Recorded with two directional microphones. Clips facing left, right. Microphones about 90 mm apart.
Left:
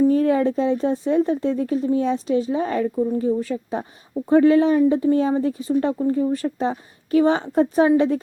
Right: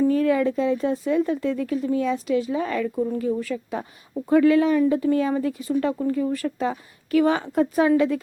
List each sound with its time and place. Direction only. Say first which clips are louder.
0.0 s a woman's voice: left 2 dB; 30° left (ahead or behind)